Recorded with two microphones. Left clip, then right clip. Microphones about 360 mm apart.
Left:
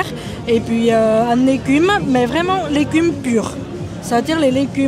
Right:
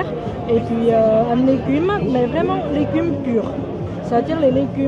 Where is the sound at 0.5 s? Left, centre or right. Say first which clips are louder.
Left 2 dB; left.